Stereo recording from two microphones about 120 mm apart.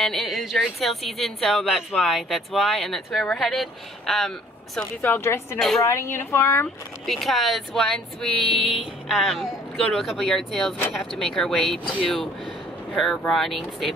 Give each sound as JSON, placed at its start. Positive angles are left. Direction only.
{"t": 0.0, "sound": "speech", "side_deg": 0}
{"t": 5.0, "sound": "speech", "side_deg": 20}
{"t": 7.1, "sound": "speech", "side_deg": 0}